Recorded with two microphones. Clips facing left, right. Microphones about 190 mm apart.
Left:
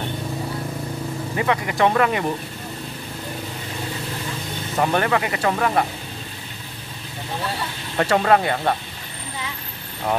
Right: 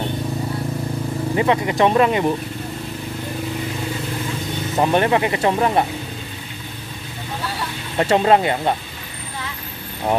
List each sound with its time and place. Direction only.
1.3 s speech: 25° right (ahead or behind)
4.7 s speech: 25° right (ahead or behind)
8.0 s speech: 20° right (ahead or behind)